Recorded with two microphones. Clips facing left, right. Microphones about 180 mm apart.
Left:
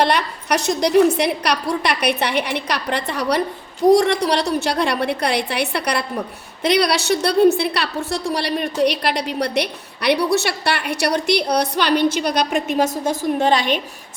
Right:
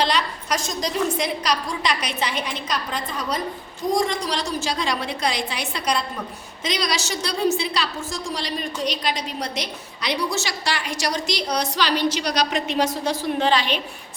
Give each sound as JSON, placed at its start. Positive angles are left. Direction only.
{"t": 0.0, "sound": "a woman's voice", "side_deg": 60}